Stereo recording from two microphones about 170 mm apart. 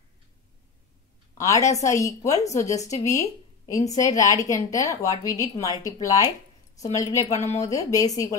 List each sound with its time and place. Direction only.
1.4 s a woman's voice: 20° left (ahead or behind)
2.4 s a woman's voice: 40° left (ahead or behind)
3.0 s a woman's voice: 20° left (ahead or behind)